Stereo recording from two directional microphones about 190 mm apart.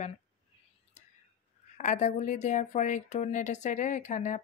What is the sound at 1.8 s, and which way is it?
Speech, 40° left (ahead or behind).